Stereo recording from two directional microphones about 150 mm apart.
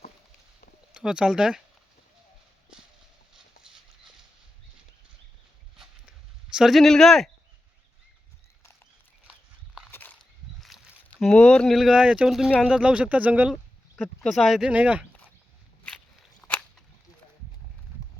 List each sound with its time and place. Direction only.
0.9 s speech: 5° right (ahead or behind)
3.3 s clip-clop: 5° right (ahead or behind)
6.5 s speech: centre (ahead or behind)
9.9 s a sound: 10° left (ahead or behind)
10.6 s speech: centre (ahead or behind)
16.4 s scissors: 5° left (ahead or behind)